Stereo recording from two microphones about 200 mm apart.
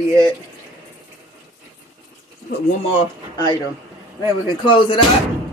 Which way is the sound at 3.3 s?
20° left (ahead or behind).